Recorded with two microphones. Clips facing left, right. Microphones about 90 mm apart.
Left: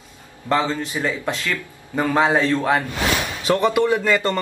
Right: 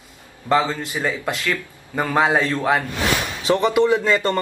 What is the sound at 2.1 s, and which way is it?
Speech, 5° right (ahead or behind).